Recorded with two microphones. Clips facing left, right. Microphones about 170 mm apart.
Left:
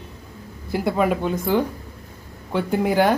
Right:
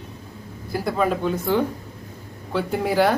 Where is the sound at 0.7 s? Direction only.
15° left (ahead or behind).